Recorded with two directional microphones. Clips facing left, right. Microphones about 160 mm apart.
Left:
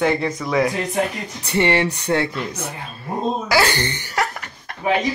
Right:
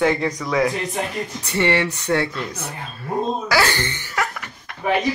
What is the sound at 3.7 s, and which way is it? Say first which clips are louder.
Chuckle: left 2 dB; 35° left (ahead or behind).